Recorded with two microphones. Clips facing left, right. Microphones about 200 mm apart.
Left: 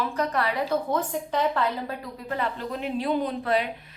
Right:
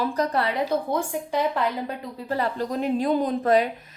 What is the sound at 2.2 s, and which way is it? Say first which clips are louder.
A woman's voice: right 4 dB; 35° right (ahead or behind).